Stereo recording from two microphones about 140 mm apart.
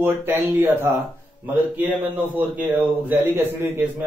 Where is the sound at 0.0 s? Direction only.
15° right (ahead or behind).